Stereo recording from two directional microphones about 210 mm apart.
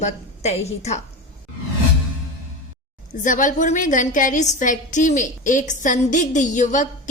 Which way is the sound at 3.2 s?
40° left (ahead or behind).